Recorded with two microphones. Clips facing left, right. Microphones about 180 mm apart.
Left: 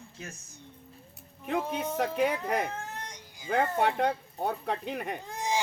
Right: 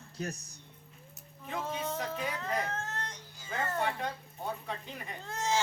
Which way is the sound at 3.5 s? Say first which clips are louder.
Left 7 dB; 65° left (ahead or behind).